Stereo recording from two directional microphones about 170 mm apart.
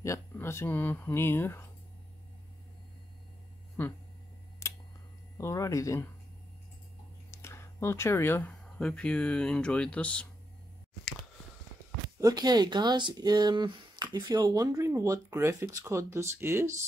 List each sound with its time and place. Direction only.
0.0 s speech: 15° left (ahead or behind)
3.8 s speech: 10° left (ahead or behind)
4.6 s a sound: 20° left (ahead or behind)
5.4 s speech: 15° left (ahead or behind)
7.2 s speech: 15° left (ahead or behind)
12.2 s speech: 20° right (ahead or behind)